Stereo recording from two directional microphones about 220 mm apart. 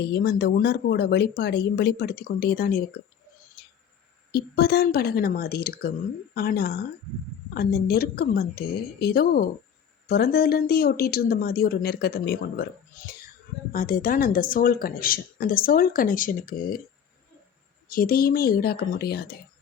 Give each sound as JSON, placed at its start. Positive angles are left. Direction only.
{"t": 0.1, "sound": "speech", "side_deg": 45}
{"t": 4.3, "sound": "speech", "side_deg": 45}
{"t": 13.7, "sound": "speech", "side_deg": 40}
{"t": 17.8, "sound": "speech", "side_deg": 40}